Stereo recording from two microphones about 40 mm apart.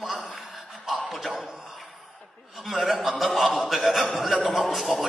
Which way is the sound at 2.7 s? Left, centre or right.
Centre.